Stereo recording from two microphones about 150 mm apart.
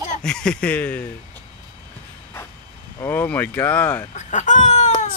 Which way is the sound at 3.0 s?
15° left (ahead or behind).